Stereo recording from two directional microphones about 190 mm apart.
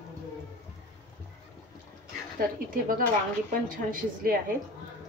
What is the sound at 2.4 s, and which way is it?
A woman's voice, 50° right (ahead or behind).